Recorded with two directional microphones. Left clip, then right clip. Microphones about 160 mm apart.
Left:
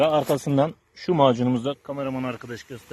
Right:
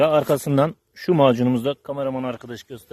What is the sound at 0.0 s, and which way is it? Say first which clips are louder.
Speech: right 3 dB; 60° right (ahead or behind).